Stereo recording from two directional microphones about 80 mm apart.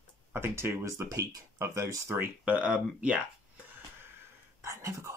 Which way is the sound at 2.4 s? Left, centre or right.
Centre.